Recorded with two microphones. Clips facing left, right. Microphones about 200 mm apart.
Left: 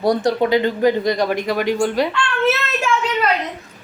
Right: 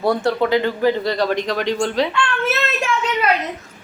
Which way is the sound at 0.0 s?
15° left (ahead or behind).